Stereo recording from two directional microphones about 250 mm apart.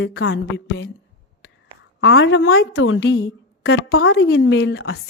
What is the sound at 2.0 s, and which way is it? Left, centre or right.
A woman's voice, left.